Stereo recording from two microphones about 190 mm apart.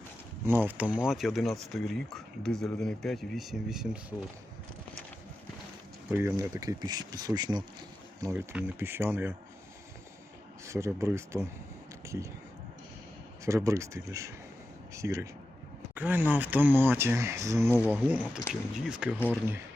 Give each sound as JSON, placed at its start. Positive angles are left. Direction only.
{"t": 0.4, "sound": "speech", "side_deg": -10}
{"t": 6.1, "sound": "speech", "side_deg": -10}
{"t": 10.7, "sound": "speech", "side_deg": -15}
{"t": 13.4, "sound": "speech", "side_deg": -15}
{"t": 17.7, "sound": "speech", "side_deg": 10}
{"t": 17.9, "sound": "speech", "side_deg": -10}